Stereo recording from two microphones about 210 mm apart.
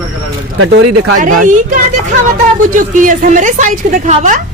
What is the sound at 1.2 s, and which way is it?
Speech, 40° right (ahead or behind).